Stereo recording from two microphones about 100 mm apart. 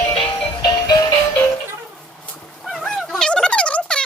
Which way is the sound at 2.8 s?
5° left (ahead or behind).